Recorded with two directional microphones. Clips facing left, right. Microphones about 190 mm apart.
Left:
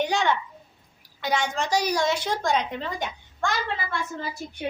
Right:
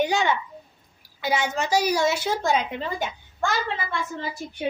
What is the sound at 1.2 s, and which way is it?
A woman's voice, 5° right (ahead or behind).